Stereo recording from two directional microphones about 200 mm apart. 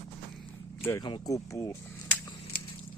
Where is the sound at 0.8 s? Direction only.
10° left (ahead or behind).